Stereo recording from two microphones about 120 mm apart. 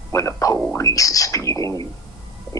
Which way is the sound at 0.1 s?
25° left (ahead or behind).